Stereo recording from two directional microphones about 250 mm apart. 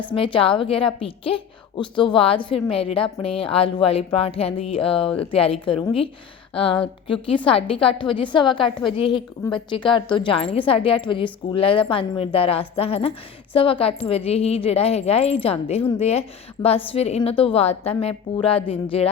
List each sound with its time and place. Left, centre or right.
0.1 s a woman's voice: left